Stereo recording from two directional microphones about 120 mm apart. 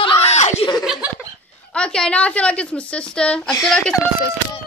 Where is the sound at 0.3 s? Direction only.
70° left (ahead or behind).